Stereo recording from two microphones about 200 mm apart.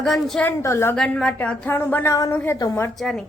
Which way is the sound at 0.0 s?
Centre (ahead or behind).